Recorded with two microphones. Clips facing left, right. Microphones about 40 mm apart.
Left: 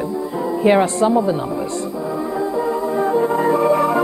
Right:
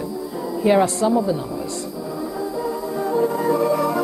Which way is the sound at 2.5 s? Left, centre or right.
Left.